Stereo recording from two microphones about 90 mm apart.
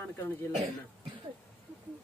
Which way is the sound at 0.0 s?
25° left (ahead or behind).